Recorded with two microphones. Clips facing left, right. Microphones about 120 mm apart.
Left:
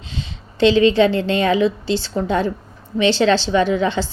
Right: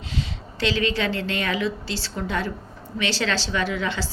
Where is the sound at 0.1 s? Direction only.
25° left (ahead or behind).